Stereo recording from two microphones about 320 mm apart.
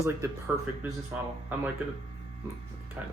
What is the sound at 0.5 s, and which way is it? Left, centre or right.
Speech, centre.